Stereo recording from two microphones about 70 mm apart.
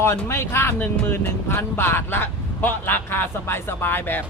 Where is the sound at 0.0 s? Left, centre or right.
Left.